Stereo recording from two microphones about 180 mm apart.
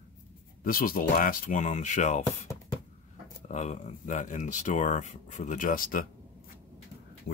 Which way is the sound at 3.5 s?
40° left (ahead or behind).